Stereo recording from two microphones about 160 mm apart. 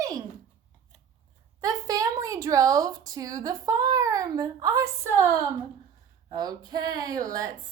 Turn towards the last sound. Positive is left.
turn(degrees=-20)  # may be behind; listen again after turning